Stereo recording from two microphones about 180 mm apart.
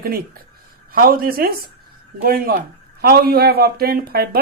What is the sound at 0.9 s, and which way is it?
Speech, 55° right (ahead or behind).